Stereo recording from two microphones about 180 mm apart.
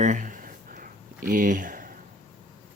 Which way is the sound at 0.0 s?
45° right (ahead or behind).